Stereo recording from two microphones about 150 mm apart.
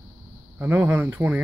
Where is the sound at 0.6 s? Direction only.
15° right (ahead or behind).